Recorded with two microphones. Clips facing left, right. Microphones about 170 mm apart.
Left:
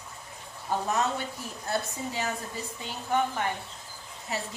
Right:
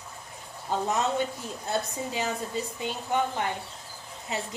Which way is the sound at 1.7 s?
20° right (ahead or behind).